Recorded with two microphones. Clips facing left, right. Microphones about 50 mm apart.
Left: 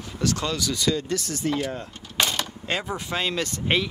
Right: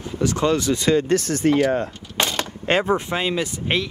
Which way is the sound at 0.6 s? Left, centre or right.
Right.